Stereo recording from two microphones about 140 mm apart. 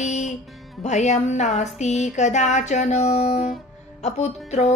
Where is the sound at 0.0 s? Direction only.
55° left (ahead or behind).